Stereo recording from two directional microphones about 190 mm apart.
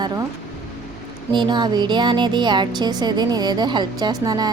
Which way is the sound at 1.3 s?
25° right (ahead or behind).